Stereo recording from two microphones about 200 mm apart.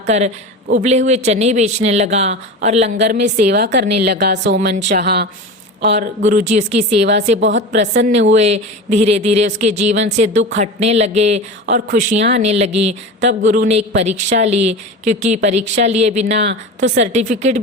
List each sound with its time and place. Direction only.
0.1 s a woman's voice: 35° right (ahead or behind); by 5.3 s 55° right (ahead or behind)
5.9 s speech: 40° right (ahead or behind)
16.5 s speech: 60° right (ahead or behind)
17.1 s speech: 35° right (ahead or behind)